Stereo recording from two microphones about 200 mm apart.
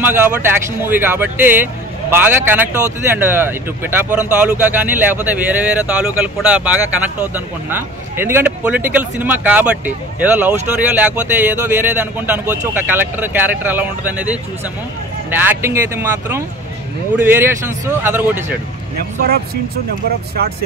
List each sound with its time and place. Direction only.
0.0 s speech: 10° right (ahead or behind)
18.9 s speech: 50° right (ahead or behind)